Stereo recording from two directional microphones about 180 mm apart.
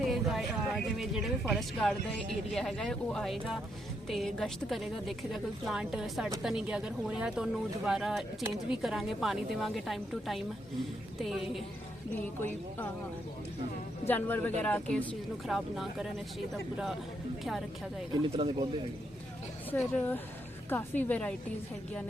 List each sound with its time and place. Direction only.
0.0 s a woman's voice: centre (ahead or behind)
14.1 s a woman's voice: 10° left (ahead or behind)
18.1 s speech: 25° right (ahead or behind)
19.7 s speech: 10° left (ahead or behind)